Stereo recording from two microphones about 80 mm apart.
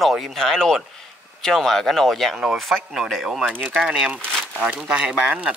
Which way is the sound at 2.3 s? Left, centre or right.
Centre.